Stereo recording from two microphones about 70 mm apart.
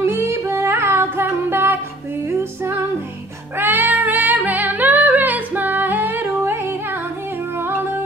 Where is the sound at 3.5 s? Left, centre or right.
Right.